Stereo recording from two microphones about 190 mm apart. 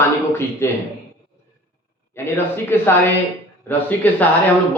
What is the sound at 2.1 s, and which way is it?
Speech, 10° left (ahead or behind).